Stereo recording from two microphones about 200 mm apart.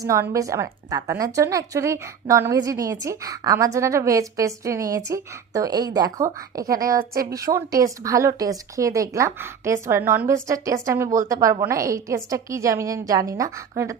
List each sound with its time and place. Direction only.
0.0 s a woman's voice: 15° right (ahead or behind)
6.7 s speech: 45° right (ahead or behind)
7.3 s a woman's voice: 15° right (ahead or behind)